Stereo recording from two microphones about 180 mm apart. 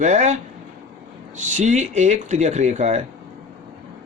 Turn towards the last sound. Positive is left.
turn(degrees=-40)  # may be behind; listen again after turning